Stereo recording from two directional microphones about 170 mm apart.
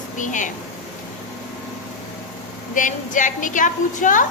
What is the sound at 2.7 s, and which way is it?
A woman's voice, 50° left (ahead or behind).